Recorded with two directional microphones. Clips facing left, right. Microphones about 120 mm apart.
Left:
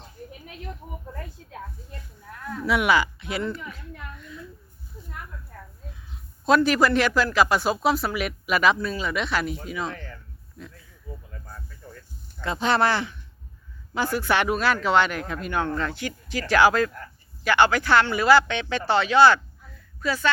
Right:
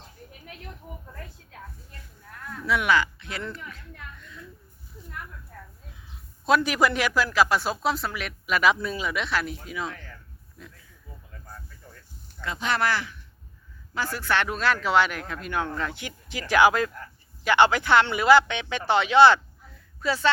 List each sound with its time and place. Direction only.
2.6 s a woman's voice: 10° left (ahead or behind)
6.4 s a man's voice: 10° right (ahead or behind); by 8.6 s 5° left (ahead or behind)
8.6 s speech: 10° right (ahead or behind)
12.4 s speech: 30° left (ahead or behind); by 16.0 s 10° right (ahead or behind)
16.0 s a man's voice: 20° right (ahead or behind)